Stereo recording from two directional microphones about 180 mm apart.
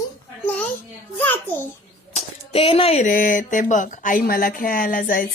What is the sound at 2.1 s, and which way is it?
Speech, 30° left (ahead or behind).